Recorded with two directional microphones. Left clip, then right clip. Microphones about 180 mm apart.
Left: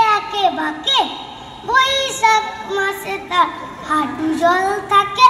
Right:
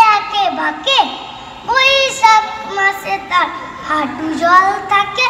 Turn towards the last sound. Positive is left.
turn(degrees=-20)  # may be behind; listen again after turning